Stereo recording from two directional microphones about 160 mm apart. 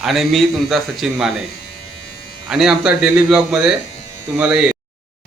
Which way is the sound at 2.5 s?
5° right (ahead or behind).